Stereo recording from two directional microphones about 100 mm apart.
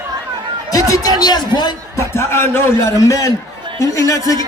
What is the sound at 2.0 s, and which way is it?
Speech, 25° left (ahead or behind).